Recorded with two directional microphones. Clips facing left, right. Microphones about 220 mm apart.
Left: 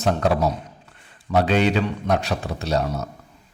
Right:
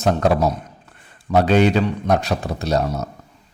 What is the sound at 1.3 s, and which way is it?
A man's voice, 40° right (ahead or behind).